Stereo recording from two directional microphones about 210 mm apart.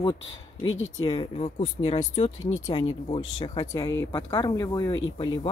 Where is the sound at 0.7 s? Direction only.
70° left (ahead or behind).